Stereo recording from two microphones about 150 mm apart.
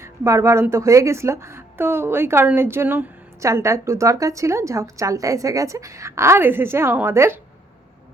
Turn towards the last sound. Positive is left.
turn(degrees=-15)  # may be behind; listen again after turning